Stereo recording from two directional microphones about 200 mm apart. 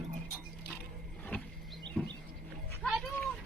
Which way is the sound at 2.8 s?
Centre (ahead or behind).